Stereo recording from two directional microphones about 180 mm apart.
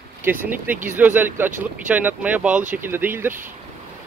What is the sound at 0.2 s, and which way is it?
Speech, 10° right (ahead or behind).